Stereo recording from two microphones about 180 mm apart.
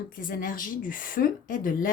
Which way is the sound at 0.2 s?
50° left (ahead or behind).